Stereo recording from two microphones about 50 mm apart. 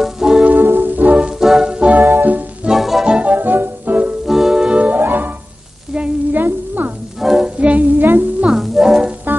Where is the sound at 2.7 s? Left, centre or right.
Centre.